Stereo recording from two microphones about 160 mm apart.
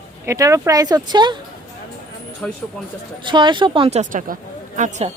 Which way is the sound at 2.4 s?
10° left (ahead or behind).